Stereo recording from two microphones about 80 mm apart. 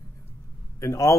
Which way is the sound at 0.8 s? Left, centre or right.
Left.